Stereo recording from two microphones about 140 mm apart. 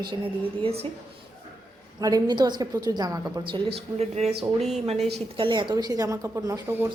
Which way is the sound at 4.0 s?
50° right (ahead or behind).